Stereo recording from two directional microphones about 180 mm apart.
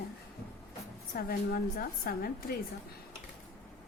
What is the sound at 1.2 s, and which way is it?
A woman's voice, 55° left (ahead or behind).